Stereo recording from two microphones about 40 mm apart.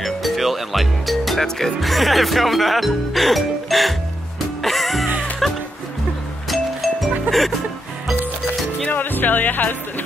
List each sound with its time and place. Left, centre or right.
0.0 s music: centre
8.8 s music: left